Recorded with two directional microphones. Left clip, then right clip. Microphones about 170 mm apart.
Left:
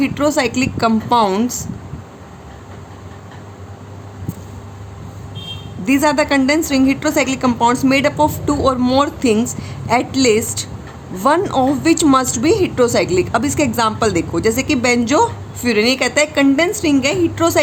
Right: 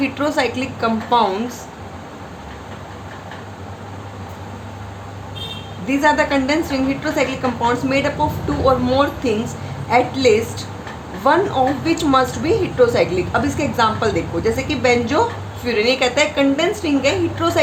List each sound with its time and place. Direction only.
0.0 s a woman's voice: 40° left (ahead or behind)
5.8 s a woman's voice: 45° left (ahead or behind)